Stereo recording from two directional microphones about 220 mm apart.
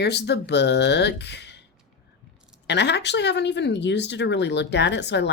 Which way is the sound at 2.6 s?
50° left (ahead or behind).